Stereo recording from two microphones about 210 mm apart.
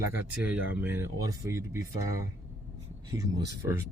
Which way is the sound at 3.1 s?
15° right (ahead or behind).